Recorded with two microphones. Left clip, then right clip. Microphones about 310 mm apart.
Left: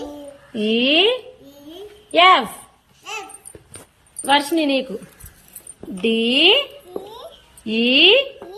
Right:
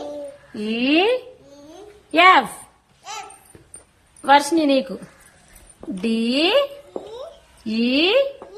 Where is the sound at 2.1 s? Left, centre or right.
Centre.